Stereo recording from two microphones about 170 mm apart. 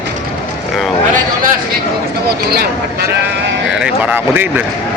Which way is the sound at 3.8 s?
10° right (ahead or behind).